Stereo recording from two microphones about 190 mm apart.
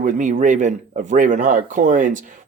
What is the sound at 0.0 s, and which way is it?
Speech, 40° right (ahead or behind).